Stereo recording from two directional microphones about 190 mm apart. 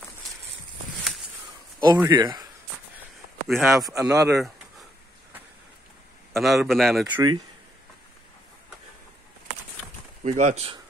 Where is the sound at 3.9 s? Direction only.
15° right (ahead or behind).